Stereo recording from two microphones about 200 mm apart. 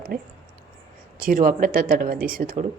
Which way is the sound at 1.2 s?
45° right (ahead or behind).